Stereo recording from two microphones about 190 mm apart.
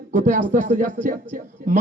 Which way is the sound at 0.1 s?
40° right (ahead or behind).